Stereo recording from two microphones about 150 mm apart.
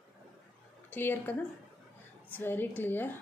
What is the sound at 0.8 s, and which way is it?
A woman's voice, 15° left (ahead or behind).